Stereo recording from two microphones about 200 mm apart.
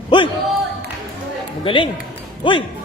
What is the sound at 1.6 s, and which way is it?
Speech, 25° left (ahead or behind).